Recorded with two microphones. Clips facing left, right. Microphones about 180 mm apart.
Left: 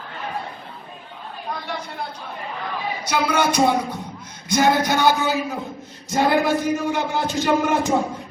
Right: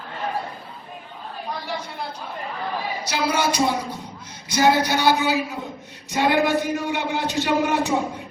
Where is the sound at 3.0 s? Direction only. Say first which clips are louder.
Left 3 dB; 55° left (ahead or behind).